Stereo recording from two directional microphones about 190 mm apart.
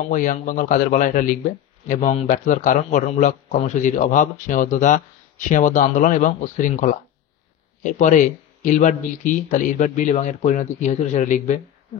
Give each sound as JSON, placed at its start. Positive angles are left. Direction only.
{"t": 0.1, "sound": "a man's voice", "side_deg": 45}